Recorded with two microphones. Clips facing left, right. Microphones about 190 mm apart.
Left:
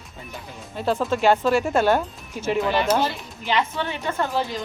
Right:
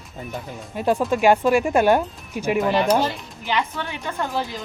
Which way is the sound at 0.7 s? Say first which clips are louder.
Right 2 dB; 15° right (ahead or behind).